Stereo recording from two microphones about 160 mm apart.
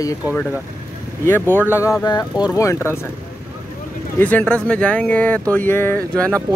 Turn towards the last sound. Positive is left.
turn(degrees=-20)  # may be behind; listen again after turning